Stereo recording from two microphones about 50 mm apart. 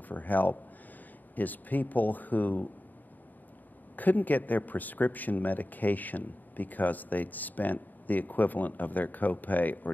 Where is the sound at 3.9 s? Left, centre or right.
Left.